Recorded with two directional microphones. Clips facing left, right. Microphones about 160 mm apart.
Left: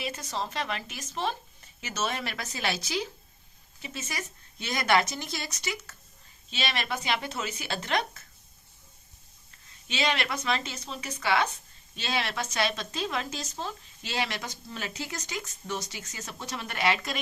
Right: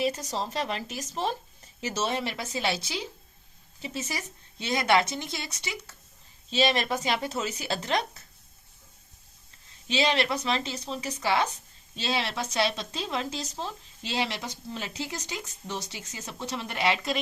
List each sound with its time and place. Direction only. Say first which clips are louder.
0.0 s a woman's voice: right 5 dB; 35° right (ahead or behind)
6.5 s a woman's voice: right 7 dB; 35° right (ahead or behind)
9.9 s a woman's voice: right 4 dB; 30° right (ahead or behind)